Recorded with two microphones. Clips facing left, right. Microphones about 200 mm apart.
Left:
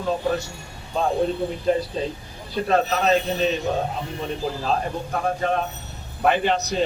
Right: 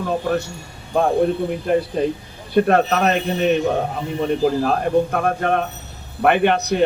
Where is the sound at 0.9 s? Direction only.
55° right (ahead or behind).